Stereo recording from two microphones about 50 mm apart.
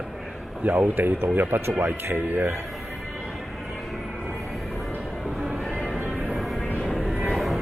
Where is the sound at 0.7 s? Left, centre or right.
Right.